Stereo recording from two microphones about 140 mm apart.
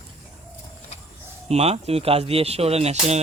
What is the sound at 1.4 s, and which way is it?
Speech, 50° right (ahead or behind).